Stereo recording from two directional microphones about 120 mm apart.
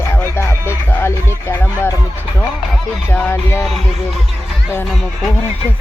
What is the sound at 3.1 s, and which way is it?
Music, 20° left (ahead or behind).